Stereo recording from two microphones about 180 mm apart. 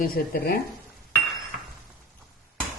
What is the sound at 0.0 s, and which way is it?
Speech, 55° left (ahead or behind).